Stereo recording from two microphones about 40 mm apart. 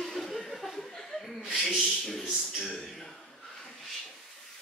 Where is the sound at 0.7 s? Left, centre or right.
Centre.